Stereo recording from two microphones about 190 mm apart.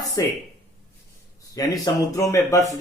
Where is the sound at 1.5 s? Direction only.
20° left (ahead or behind).